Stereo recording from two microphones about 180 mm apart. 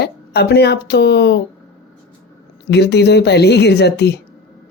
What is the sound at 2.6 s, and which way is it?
Speech, 70° left (ahead or behind).